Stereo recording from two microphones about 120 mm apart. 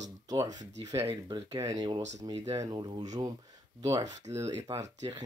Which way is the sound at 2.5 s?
35° right (ahead or behind).